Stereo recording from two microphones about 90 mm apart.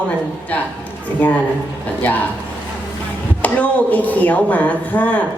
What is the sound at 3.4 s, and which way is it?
Speech, 15° left (ahead or behind).